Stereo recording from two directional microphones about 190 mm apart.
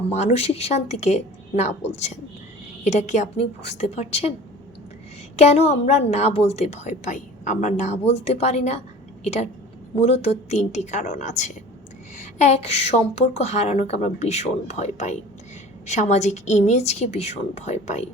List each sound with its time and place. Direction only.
0.1 s a woman's voice: 35° left (ahead or behind)
5.4 s a woman's voice: 35° left (ahead or behind)